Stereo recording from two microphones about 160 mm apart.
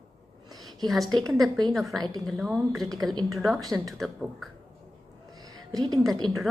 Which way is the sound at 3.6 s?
20° right (ahead or behind).